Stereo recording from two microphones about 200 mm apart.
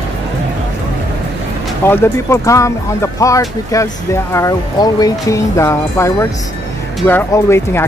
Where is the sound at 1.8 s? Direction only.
10° left (ahead or behind).